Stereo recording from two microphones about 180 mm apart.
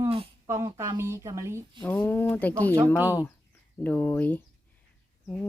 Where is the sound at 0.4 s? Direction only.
15° right (ahead or behind).